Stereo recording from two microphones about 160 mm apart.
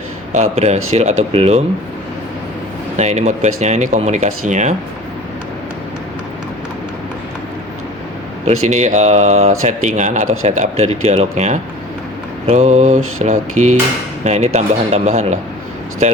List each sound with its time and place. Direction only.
0.3 s speech: 45° right (ahead or behind)
3.0 s speech: 45° right (ahead or behind)
8.4 s speech: 45° right (ahead or behind)